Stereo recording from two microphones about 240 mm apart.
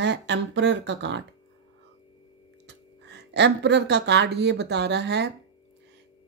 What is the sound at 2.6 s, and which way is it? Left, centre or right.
Speech, right.